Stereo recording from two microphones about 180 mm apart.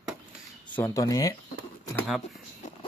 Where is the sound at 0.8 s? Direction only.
15° left (ahead or behind).